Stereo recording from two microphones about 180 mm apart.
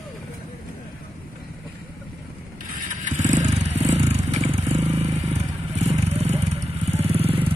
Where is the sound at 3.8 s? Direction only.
40° right (ahead or behind).